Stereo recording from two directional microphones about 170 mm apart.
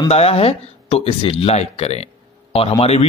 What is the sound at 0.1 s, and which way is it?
A man's voice, 35° left (ahead or behind).